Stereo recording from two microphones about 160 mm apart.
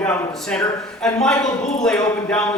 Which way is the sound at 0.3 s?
5° left (ahead or behind).